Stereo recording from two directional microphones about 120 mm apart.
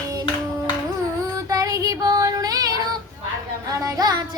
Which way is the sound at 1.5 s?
30° right (ahead or behind).